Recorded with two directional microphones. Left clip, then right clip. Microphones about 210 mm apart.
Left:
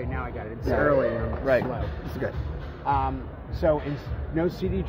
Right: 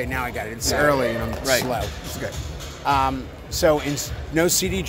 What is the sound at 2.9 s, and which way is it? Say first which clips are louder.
A man's voice: right 5 dB; 60° right (ahead or behind).